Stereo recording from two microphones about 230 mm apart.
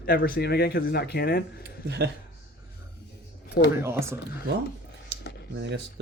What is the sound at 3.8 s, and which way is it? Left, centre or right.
Speech, centre.